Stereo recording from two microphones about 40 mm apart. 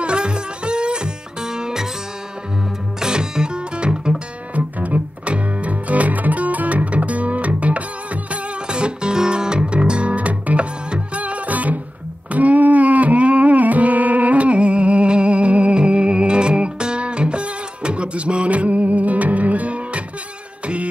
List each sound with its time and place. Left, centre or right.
0.0 s music: right
3.0 s music: centre
4.6 s music: right
8.6 s music: right